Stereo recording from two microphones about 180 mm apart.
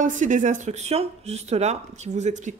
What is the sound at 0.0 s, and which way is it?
Speech, 45° right (ahead or behind).